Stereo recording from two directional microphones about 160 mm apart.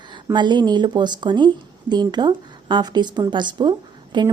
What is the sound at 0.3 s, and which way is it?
Speech, 30° right (ahead or behind).